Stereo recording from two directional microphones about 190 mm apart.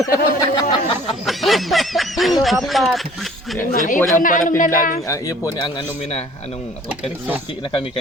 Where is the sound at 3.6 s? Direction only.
45° left (ahead or behind).